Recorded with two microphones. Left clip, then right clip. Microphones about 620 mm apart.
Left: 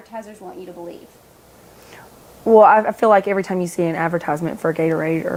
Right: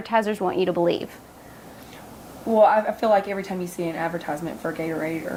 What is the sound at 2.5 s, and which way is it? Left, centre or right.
A woman's voice, left.